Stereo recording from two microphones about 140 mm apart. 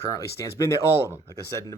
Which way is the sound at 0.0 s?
20° left (ahead or behind).